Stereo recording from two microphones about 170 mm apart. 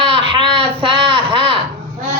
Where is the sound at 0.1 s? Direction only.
30° right (ahead or behind).